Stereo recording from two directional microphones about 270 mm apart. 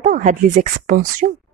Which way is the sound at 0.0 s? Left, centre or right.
Right.